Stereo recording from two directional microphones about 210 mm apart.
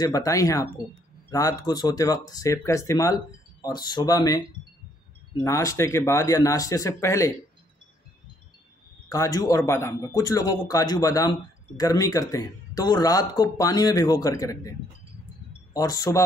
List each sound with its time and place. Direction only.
0.0 s a man's voice: 15° left (ahead or behind)
5.4 s a man's voice: 15° left (ahead or behind)
9.1 s a man's voice: 15° left (ahead or behind)